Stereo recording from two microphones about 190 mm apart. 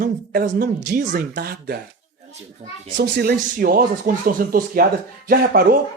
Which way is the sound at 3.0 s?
60° right (ahead or behind).